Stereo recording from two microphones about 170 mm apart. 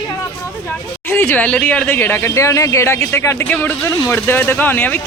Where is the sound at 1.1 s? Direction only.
10° left (ahead or behind).